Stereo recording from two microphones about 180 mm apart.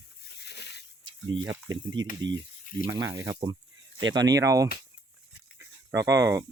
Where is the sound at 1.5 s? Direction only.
15° right (ahead or behind).